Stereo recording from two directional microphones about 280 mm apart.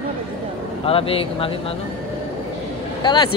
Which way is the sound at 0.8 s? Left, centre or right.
Centre.